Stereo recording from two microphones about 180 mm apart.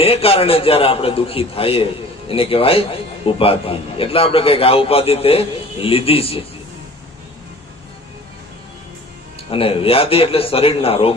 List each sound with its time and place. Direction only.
0.0 s a man's voice: 30° left (ahead or behind)
9.5 s a man's voice: 30° left (ahead or behind)